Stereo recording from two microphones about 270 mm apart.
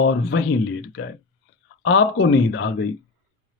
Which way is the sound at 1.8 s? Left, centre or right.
Left.